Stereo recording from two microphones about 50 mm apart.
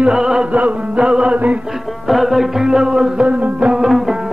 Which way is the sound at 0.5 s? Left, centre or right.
Right.